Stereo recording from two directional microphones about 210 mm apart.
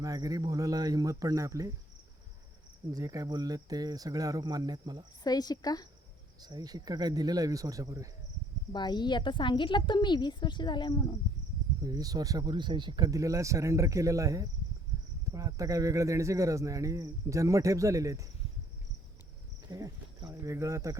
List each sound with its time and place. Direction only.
0.0 s speech: 15° right (ahead or behind)
2.9 s speech: 15° right (ahead or behind)
5.2 s a woman's voice: 20° left (ahead or behind)
6.4 s speech: 20° right (ahead or behind)
8.7 s a woman's voice: 20° left (ahead or behind)
11.8 s speech: 20° right (ahead or behind)
19.7 s speech: 15° right (ahead or behind)